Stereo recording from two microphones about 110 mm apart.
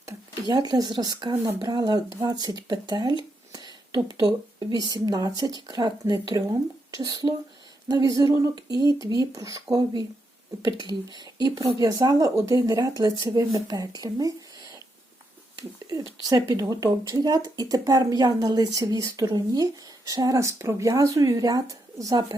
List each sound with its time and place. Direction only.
0.4 s speech: 40° right (ahead or behind)
3.5 s a sound: 35° right (ahead or behind)
4.9 s speech: 35° right (ahead or behind)
16.2 s speech: 35° right (ahead or behind)